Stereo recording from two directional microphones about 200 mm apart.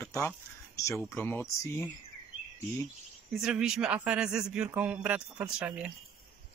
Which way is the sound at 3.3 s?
5° right (ahead or behind).